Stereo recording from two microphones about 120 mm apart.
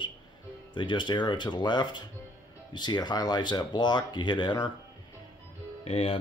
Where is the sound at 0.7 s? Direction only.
40° left (ahead or behind).